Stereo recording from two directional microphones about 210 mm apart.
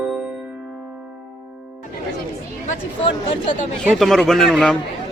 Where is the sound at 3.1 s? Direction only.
20° left (ahead or behind).